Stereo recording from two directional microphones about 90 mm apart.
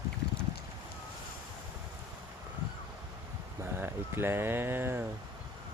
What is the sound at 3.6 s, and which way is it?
Speech, 25° right (ahead or behind).